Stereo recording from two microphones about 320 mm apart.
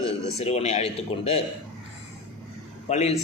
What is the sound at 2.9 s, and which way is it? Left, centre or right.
Speech, left.